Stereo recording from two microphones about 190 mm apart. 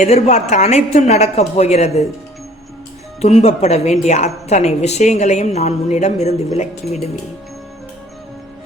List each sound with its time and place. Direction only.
0.0 s a woman's voice: 35° left (ahead or behind)
3.2 s a woman's voice: 35° left (ahead or behind)